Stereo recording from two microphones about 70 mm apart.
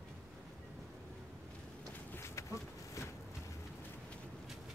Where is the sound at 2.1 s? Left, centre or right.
Left.